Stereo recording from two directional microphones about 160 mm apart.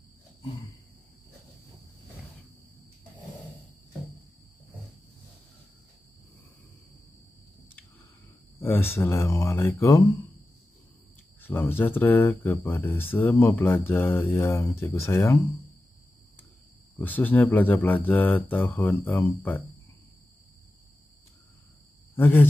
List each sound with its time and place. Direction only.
8.5 s speech: 15° left (ahead or behind)
11.4 s speech: 15° left (ahead or behind)
17.0 s speech: 10° left (ahead or behind)
22.1 s speech: 15° left (ahead or behind)